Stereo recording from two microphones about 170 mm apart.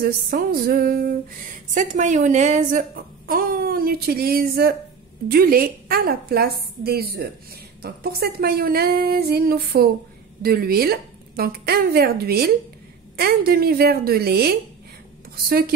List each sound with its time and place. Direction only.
0.0 s speech: 60° right (ahead or behind)
1.7 s a woman's voice: 45° right (ahead or behind)
3.3 s speech: 60° right (ahead or behind)